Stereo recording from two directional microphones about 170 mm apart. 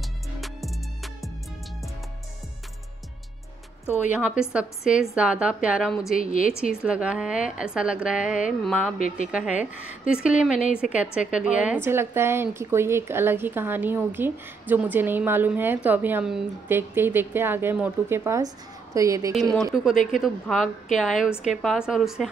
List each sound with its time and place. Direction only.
0.4 s music: centre (ahead or behind)
4.1 s a woman's voice: 5° right (ahead or behind)
6.1 s a woman's voice: 55° left (ahead or behind)
6.6 s a woman's voice: 5° right (ahead or behind)
19.5 s a woman's voice: centre (ahead or behind)